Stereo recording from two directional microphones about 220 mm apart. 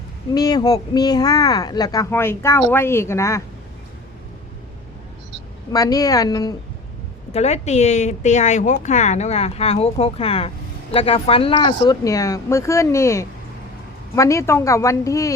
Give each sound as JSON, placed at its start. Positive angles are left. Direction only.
{"t": 0.3, "sound": "speech", "side_deg": 15}
{"t": 5.7, "sound": "speech", "side_deg": 15}
{"t": 7.3, "sound": "speech", "side_deg": 30}